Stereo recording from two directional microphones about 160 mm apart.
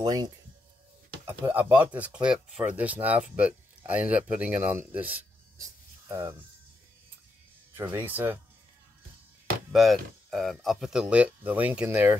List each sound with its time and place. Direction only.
0.0 s speech: 25° right (ahead or behind)
1.2 s speech: 10° right (ahead or behind)
7.7 s speech: 15° right (ahead or behind)
9.7 s speech: centre (ahead or behind)